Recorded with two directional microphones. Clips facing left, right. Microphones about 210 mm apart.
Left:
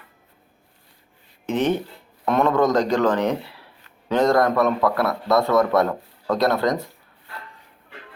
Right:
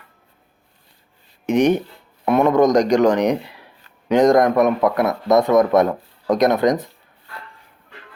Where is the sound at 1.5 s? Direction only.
15° right (ahead or behind).